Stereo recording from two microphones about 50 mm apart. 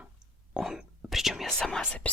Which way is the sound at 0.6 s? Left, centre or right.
Centre.